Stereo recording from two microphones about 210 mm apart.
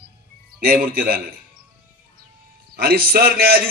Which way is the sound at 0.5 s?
45° right (ahead or behind).